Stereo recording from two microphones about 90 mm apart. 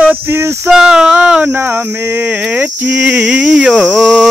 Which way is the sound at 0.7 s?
5° right (ahead or behind).